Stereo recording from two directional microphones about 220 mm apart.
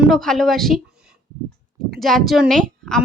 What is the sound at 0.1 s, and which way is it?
Speech, centre (ahead or behind).